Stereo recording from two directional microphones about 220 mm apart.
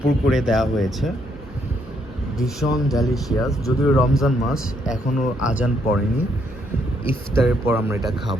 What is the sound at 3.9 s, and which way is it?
Speech, centre (ahead or behind).